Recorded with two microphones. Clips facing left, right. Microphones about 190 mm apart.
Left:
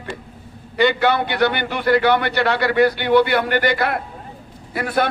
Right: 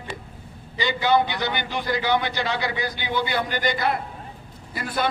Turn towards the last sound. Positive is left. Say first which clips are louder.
# left 7 dB
turn(degrees=65)  # may be behind; listen again after turning